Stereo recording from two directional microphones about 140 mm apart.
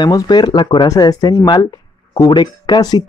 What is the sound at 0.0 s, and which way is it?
Speech, 30° left (ahead or behind).